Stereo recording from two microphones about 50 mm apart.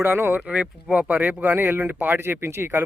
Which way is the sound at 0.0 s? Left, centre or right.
Right.